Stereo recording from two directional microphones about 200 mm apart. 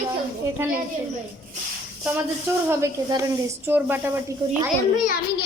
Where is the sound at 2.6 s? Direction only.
15° right (ahead or behind).